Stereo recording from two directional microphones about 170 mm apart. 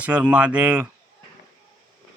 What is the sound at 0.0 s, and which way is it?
Speech, 10° right (ahead or behind).